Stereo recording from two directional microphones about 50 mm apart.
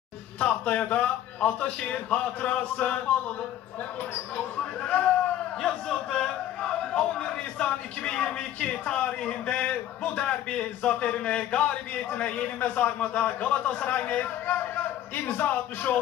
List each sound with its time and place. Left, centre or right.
0.4 s a man's voice: left
4.8 s a man's voice: left